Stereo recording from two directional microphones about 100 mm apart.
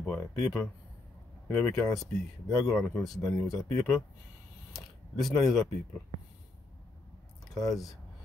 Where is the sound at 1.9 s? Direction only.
Centre (ahead or behind).